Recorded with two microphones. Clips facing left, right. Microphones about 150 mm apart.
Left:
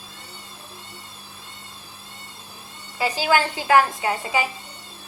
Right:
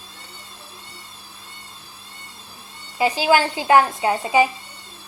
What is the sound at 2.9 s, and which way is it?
A woman's voice, 15° right (ahead or behind).